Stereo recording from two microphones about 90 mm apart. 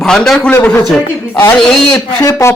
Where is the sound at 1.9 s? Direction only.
35° left (ahead or behind).